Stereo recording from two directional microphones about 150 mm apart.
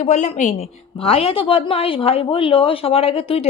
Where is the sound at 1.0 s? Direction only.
40° left (ahead or behind).